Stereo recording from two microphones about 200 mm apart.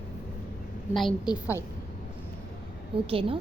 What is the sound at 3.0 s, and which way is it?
Speech, 25° right (ahead or behind).